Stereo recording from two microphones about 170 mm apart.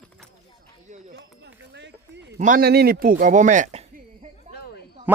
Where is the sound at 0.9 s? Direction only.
45° right (ahead or behind).